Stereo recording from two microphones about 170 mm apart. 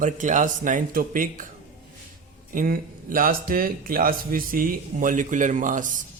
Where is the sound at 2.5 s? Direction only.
55° right (ahead or behind).